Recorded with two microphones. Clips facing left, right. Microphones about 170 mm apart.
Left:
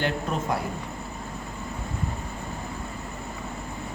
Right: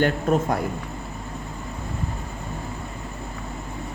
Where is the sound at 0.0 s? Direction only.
50° right (ahead or behind).